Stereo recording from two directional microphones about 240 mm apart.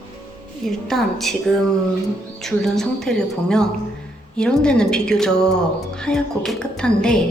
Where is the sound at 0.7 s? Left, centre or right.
Centre.